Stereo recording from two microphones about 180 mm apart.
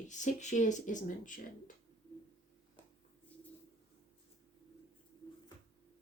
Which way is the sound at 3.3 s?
10° left (ahead or behind).